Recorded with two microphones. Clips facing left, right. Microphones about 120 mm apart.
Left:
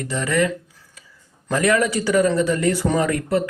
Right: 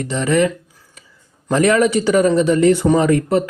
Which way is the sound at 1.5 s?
25° right (ahead or behind).